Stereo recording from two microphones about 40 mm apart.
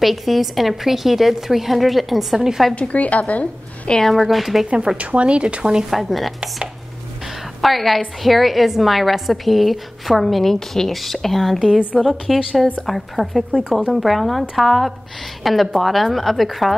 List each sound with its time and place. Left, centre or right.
0.0 s a woman's voice: centre
2.7 s speech: left
4.0 s a woman's voice: centre
4.9 s speech: right
5.9 s a woman's voice: centre
7.6 s a woman's voice: centre